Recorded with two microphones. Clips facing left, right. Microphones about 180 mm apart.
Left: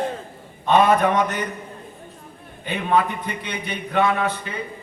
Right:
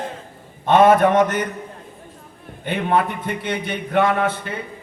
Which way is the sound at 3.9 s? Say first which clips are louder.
Right 2 dB; 50° right (ahead or behind).